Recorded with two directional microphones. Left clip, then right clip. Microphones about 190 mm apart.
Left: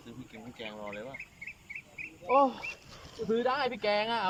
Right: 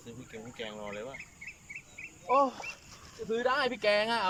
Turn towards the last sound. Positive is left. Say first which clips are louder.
# right 2 dB
turn(degrees=0)  # may be behind; listen again after turning